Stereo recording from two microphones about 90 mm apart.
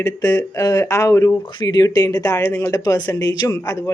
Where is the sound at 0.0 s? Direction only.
40° left (ahead or behind).